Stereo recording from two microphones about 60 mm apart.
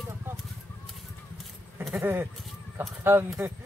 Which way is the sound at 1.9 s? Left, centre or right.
Right.